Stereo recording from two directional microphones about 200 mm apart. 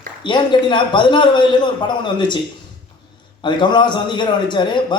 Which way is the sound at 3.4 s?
20° left (ahead or behind).